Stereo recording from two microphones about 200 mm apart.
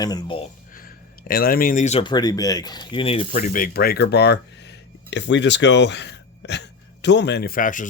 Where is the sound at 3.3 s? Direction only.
40° left (ahead or behind).